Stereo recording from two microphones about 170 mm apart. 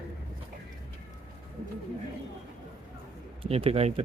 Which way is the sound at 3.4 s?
35° right (ahead or behind).